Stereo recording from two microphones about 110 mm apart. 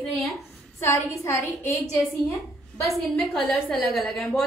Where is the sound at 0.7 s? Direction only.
25° left (ahead or behind).